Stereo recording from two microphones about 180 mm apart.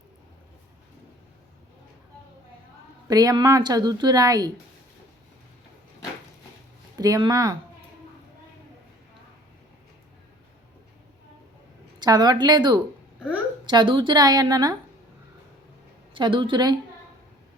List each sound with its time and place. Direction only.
3.1 s a woman's voice: 20° right (ahead or behind)
6.9 s speech: 20° right (ahead or behind)
11.9 s a woman's voice: 20° right (ahead or behind)
13.1 s a sound: 5° right (ahead or behind)
13.7 s a woman's voice: 25° right (ahead or behind)
16.1 s a woman's voice: 25° right (ahead or behind)